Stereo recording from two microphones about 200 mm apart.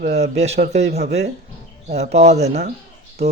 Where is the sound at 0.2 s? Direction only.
35° right (ahead or behind).